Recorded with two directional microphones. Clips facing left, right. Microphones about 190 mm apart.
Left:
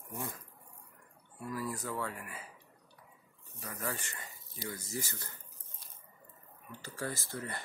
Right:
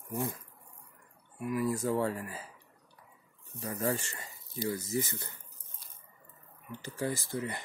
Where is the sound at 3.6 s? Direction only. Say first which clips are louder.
Right 8 dB; 30° right (ahead or behind).